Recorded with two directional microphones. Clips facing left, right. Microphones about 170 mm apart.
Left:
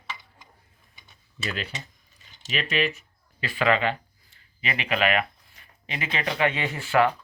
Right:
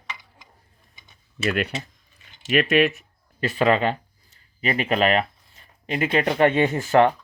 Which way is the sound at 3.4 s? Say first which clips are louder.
Right 4 dB; 40° right (ahead or behind).